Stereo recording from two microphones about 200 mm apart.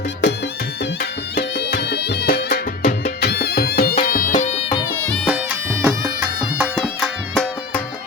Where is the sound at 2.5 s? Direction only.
45° left (ahead or behind).